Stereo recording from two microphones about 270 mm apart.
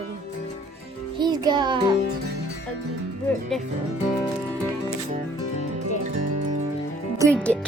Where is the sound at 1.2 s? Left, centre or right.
Centre.